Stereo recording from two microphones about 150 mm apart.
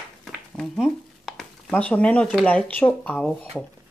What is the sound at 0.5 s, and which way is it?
Speech, centre (ahead or behind).